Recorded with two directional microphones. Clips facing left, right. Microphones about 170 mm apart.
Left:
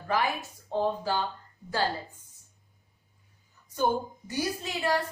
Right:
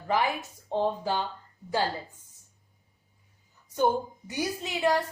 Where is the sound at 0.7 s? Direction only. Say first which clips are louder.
Right 1 dB; 20° right (ahead or behind).